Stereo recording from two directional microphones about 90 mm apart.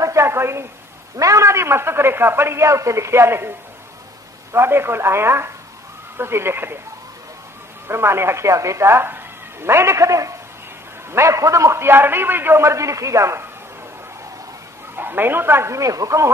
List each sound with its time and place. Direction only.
0.0 s a sound: 30° right (ahead or behind)
1.1 s a man's voice: 35° right (ahead or behind)
7.9 s a man's voice: 30° right (ahead or behind)
15.0 s a man's voice: 25° right (ahead or behind)